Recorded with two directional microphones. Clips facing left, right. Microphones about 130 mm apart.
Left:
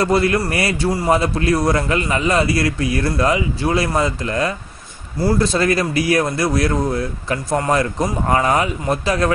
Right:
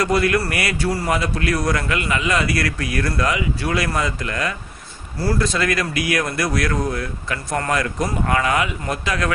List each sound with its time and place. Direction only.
0.0 s a man's voice: 30° left (ahead or behind)